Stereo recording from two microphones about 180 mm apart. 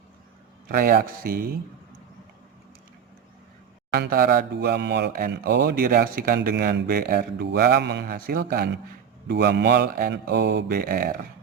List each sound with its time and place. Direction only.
0.7 s speech: 50° right (ahead or behind)
3.9 s speech: 55° right (ahead or behind)
9.2 s speech: 70° right (ahead or behind); by 11.2 s 50° right (ahead or behind)